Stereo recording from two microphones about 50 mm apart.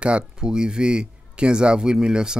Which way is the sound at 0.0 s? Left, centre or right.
Centre.